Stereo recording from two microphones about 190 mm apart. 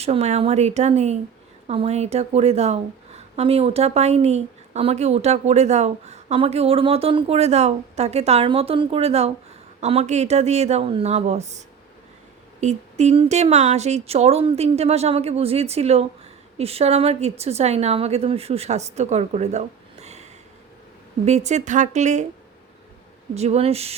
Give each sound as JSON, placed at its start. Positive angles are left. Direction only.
{"t": 0.0, "sound": "a woman's voice", "side_deg": -35}
{"t": 21.2, "sound": "a woman's voice", "side_deg": -35}
{"t": 23.3, "sound": "a woman's voice", "side_deg": -35}